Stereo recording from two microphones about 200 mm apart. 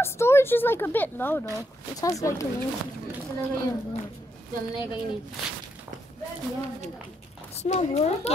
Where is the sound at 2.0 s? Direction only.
15° left (ahead or behind).